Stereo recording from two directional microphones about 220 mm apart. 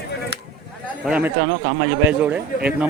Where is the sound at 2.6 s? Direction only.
5° right (ahead or behind).